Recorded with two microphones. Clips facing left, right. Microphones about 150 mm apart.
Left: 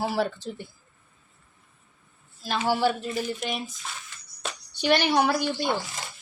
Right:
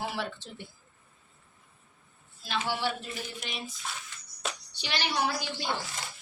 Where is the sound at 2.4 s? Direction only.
40° left (ahead or behind).